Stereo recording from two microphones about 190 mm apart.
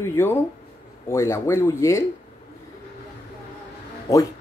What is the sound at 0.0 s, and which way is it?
Speech, 15° left (ahead or behind).